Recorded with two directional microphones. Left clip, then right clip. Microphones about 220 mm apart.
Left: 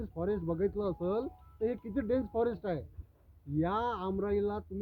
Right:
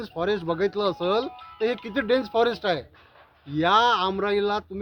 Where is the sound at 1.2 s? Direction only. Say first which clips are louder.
Right 9 dB; 25° right (ahead or behind).